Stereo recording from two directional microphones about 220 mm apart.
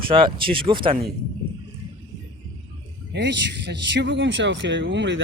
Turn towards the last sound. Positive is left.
turn(degrees=-50)  # may be behind; listen again after turning